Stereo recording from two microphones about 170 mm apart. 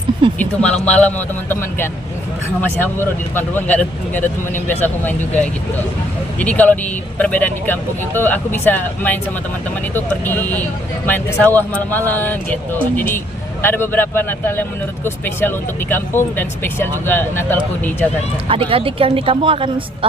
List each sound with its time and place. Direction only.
0.3 s speech: 5° left (ahead or behind)
13.6 s speech: 15° left (ahead or behind)
18.4 s speech: 30° right (ahead or behind)